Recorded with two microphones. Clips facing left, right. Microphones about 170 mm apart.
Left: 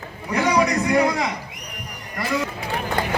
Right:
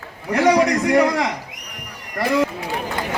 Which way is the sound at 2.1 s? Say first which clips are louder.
Right 6 dB; 55° right (ahead or behind).